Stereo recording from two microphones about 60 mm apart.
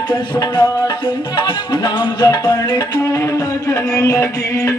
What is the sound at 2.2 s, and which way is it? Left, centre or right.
Music, left.